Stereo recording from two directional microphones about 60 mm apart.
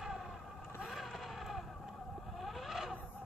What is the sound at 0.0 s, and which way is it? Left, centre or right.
Vehicle, centre.